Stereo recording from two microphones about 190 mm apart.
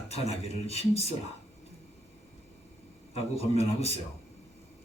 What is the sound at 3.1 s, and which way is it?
Speech, 30° left (ahead or behind).